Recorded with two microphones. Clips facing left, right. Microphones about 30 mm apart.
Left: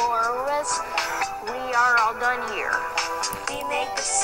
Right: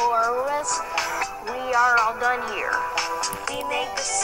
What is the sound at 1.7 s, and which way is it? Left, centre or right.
Speech, centre.